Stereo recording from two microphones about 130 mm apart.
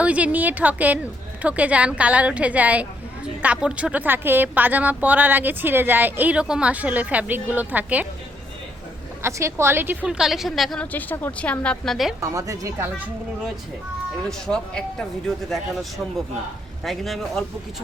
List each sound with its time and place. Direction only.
0.0 s speech: 10° right (ahead or behind)
9.2 s a woman's voice: 20° right (ahead or behind); by 10.8 s centre (ahead or behind)
10.9 s a woman's voice: 15° left (ahead or behind)
12.2 s a woman's voice: 25° right (ahead or behind)
14.3 s a woman's voice: 5° left (ahead or behind)